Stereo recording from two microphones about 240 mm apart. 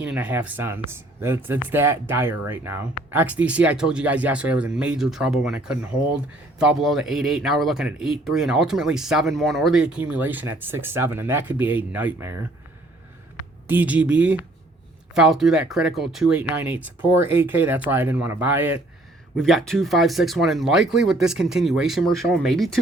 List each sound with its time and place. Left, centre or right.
0.0 s speech: centre
13.7 s speech: centre